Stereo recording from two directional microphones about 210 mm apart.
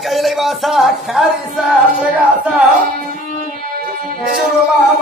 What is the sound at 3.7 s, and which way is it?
Music, 40° right (ahead or behind).